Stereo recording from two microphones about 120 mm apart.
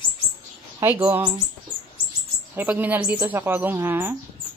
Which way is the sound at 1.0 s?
15° right (ahead or behind).